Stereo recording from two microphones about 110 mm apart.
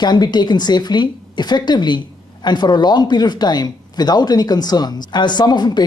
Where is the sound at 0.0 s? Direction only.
40° left (ahead or behind).